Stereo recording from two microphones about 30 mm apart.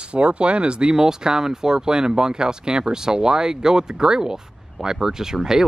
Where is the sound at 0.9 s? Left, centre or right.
Right.